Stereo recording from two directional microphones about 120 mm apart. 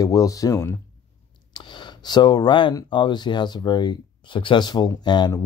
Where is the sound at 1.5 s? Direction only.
40° left (ahead or behind).